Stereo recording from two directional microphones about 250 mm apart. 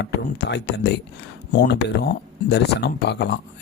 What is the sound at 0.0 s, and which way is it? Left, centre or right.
Speech, left.